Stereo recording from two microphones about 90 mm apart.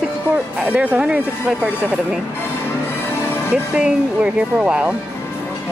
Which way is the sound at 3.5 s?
10° right (ahead or behind).